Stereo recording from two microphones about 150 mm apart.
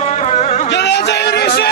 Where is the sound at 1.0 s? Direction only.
90° left.